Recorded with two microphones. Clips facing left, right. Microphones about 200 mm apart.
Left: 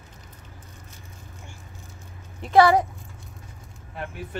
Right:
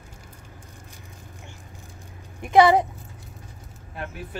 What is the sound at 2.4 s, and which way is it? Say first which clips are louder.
Speech: right 1 dB; 15° right (ahead or behind).